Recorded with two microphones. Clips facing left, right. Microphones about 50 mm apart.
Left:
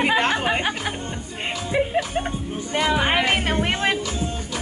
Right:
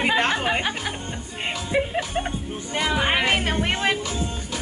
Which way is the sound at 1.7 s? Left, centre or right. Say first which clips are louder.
Left 2 dB; centre.